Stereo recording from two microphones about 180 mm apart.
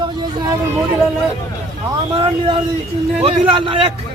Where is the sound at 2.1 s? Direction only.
30° right (ahead or behind).